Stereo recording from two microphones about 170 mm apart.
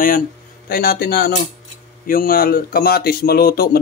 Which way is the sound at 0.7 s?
65° left (ahead or behind).